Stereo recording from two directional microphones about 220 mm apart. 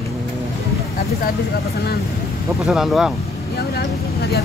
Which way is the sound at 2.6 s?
Centre (ahead or behind).